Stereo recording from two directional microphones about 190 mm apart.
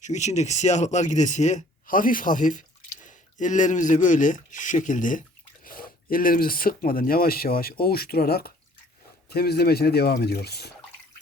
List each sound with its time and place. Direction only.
0.0 s speech: 40° left (ahead or behind); by 10.7 s 60° left (ahead or behind)